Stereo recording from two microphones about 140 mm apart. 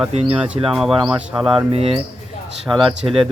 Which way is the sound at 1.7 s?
45° right (ahead or behind).